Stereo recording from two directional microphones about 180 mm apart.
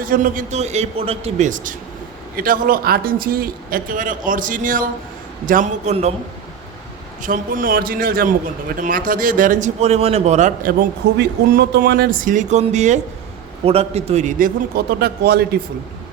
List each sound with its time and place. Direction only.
0.0 s a man's voice: 50° right (ahead or behind)
7.2 s a man's voice: 50° right (ahead or behind)